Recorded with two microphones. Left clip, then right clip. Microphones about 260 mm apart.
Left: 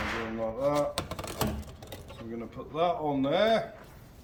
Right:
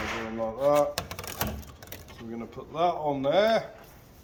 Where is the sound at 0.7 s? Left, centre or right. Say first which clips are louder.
Right 5 dB; centre.